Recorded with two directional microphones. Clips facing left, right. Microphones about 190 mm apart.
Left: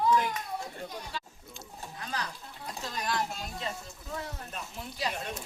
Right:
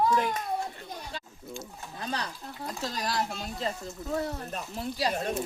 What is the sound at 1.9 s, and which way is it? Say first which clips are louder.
Speech: right 4 dB; 30° right (ahead or behind).